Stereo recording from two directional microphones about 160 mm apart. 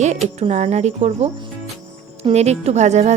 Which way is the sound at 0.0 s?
45° right (ahead or behind).